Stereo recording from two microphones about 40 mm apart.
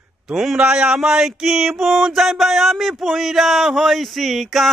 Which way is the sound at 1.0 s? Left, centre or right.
Centre.